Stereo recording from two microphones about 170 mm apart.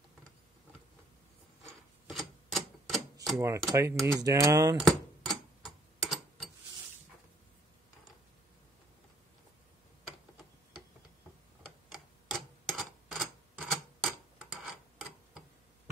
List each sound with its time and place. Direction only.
2.0 s typewriter: centre (ahead or behind)
3.3 s speech: 15° right (ahead or behind)
4.7 s tick-tock: centre (ahead or behind)
11.9 s tick-tock: centre (ahead or behind)